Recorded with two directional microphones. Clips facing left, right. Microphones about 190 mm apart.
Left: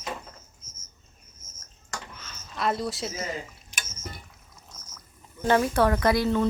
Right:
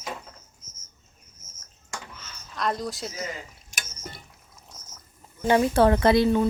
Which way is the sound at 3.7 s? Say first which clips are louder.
Right 1 dB; 45° right (ahead or behind).